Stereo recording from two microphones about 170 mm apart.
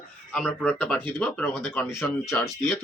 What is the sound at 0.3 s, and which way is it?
Speech, 5° left (ahead or behind).